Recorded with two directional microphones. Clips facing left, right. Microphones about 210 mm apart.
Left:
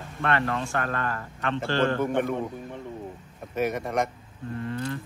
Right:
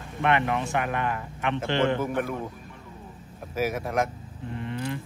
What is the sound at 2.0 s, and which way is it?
Speech, 5° right (ahead or behind).